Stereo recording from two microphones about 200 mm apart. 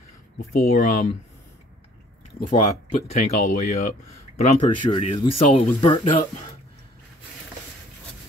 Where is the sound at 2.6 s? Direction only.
35° left (ahead or behind).